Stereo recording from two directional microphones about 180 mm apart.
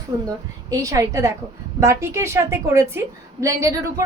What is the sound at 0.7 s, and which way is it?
A woman's voice, 20° right (ahead or behind).